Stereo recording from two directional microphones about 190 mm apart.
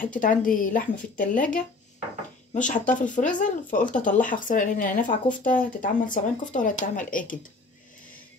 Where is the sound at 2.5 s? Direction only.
40° left (ahead or behind).